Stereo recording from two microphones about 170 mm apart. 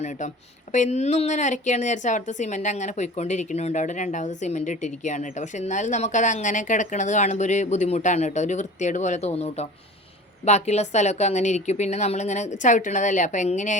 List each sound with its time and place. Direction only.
0.0 s speech: 45° left (ahead or behind)